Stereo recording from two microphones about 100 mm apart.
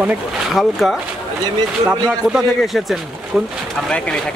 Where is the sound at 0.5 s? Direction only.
Centre (ahead or behind).